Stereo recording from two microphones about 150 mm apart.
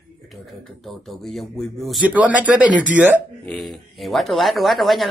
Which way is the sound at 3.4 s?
5° left (ahead or behind).